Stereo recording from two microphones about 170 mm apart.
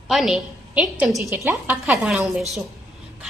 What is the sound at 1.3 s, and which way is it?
A woman's voice, 10° right (ahead or behind).